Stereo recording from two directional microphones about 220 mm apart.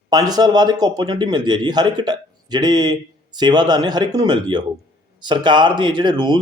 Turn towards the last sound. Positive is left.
turn(degrees=-20)  # may be behind; listen again after turning